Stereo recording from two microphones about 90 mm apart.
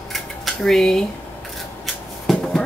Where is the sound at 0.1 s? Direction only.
5° left (ahead or behind).